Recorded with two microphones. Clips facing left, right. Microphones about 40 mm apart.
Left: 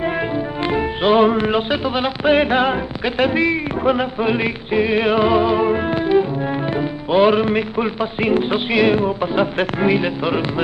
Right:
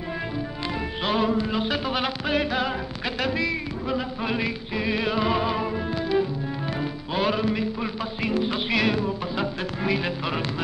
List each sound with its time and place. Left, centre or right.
0.0 s music: left
1.3 s a sound: left
1.7 s speech: centre
2.2 s speech: left
4.2 s speech: left
5.3 s speech: centre
5.7 s music: left
6.1 s music: left
8.9 s speech: left